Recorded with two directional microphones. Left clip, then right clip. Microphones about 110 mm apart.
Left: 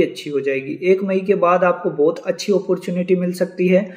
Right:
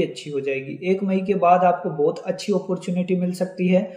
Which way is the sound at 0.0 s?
15° right (ahead or behind).